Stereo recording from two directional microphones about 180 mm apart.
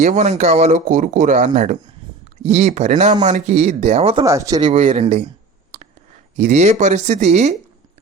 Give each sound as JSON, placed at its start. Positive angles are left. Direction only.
{"t": 0.0, "sound": "speech", "side_deg": -40}
{"t": 4.2, "sound": "speech", "side_deg": -15}
{"t": 4.7, "sound": "speech", "side_deg": -40}
{"t": 6.3, "sound": "speech", "side_deg": -40}